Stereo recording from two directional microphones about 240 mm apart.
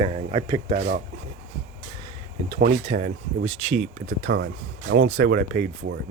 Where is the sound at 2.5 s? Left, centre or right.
Right.